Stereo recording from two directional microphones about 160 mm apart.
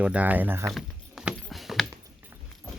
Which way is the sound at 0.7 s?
Centre (ahead or behind).